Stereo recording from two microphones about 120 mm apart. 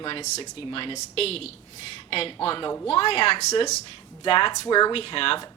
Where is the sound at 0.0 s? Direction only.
40° left (ahead or behind).